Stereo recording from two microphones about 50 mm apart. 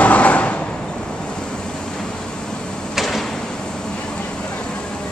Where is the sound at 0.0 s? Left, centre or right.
Left.